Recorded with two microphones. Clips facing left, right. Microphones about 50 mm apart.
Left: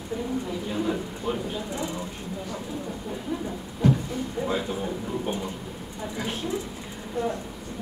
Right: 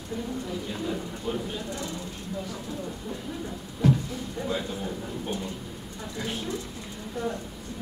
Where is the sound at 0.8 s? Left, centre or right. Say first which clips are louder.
Left 3 dB; left.